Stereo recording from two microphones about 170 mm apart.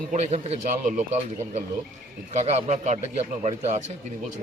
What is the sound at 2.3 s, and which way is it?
Speech, 45° right (ahead or behind).